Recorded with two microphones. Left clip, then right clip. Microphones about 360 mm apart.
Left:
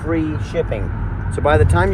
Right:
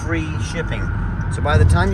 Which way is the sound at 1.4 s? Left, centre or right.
Left.